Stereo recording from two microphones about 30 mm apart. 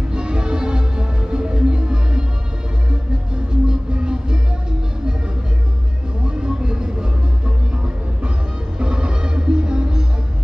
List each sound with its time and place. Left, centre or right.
0.1 s music: right
3.6 s music: right
6.4 s music: right
8.7 s music: right